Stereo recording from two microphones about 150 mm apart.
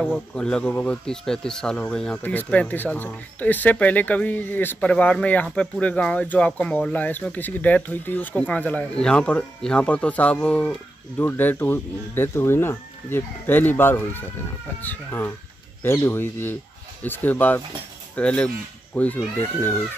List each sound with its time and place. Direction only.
0.0 s speech: 5° left (ahead or behind)